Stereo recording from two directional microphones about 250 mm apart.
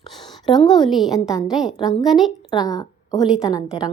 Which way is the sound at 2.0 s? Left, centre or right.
Centre.